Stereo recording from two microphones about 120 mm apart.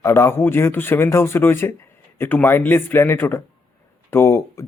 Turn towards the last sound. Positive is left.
turn(degrees=25)  # may be behind; listen again after turning